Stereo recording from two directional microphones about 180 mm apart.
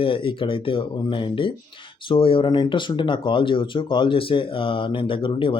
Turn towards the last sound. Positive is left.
turn(degrees=30)  # may be behind; listen again after turning